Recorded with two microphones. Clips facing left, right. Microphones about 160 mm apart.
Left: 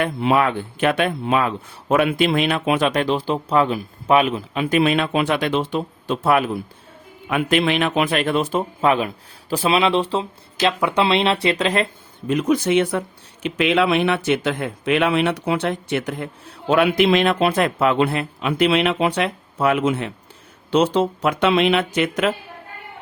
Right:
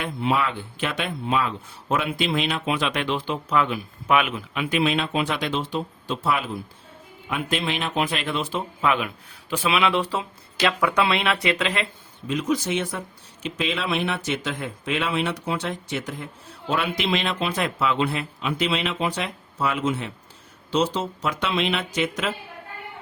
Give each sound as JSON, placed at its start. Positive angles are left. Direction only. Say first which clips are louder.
{"t": 0.0, "sound": "speech", "louder": "left 6 dB", "side_deg": 60}
{"t": 4.8, "sound": "speech", "louder": "left 4 dB", "side_deg": 55}
{"t": 12.3, "sound": "speech", "louder": "left 6 dB", "side_deg": 55}